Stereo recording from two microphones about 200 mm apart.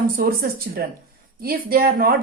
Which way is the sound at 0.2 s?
50° right (ahead or behind).